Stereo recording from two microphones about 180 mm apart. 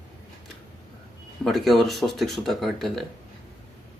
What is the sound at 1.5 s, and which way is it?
Speech, centre (ahead or behind).